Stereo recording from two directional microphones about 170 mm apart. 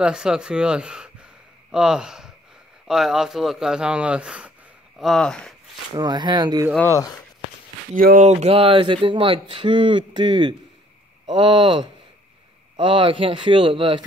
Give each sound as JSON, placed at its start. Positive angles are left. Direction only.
{"t": 0.0, "sound": "speech", "side_deg": -5}
{"t": 5.9, "sound": "speech", "side_deg": -25}
{"t": 6.9, "sound": "speech", "side_deg": 20}
{"t": 7.9, "sound": "speech", "side_deg": -55}
{"t": 8.3, "sound": "speech", "side_deg": -40}